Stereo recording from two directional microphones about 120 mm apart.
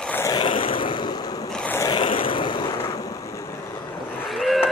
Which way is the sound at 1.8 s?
40° left (ahead or behind).